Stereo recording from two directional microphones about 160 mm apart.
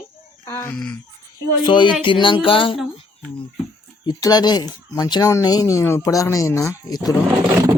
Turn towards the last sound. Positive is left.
turn(degrees=-20)  # may be behind; listen again after turning